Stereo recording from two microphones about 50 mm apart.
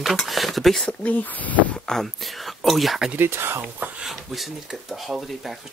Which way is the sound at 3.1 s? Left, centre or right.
Right.